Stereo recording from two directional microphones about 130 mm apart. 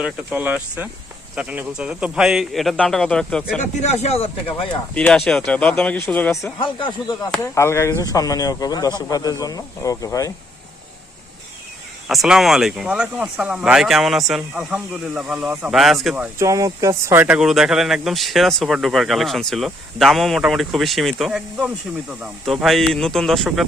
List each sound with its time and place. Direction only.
0.0 s speech: 10° right (ahead or behind)
3.8 s speech: 55° left (ahead or behind)
4.9 s speech: 10° left (ahead or behind)
6.6 s speech: 40° left (ahead or behind)
7.4 s speech: 20° left (ahead or behind)
12.0 s speech: centre (ahead or behind)
16.4 s speech: 25° right (ahead or behind)
17.2 s speech: 5° right (ahead or behind)